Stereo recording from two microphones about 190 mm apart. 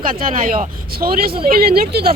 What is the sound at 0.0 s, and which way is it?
A woman's voice, 45° right (ahead or behind).